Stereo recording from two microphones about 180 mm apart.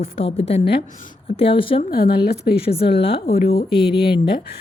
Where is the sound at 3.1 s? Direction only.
55° left (ahead or behind).